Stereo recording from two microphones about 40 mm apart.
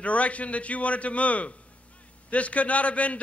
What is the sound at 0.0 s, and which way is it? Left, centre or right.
A man's voice, left.